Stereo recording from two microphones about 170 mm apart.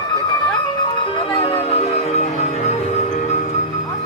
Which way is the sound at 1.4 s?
30° left (ahead or behind).